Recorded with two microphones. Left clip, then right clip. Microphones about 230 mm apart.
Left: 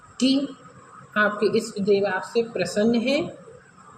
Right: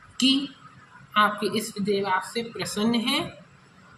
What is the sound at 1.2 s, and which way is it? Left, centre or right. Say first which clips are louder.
Speech: left 3 dB; right.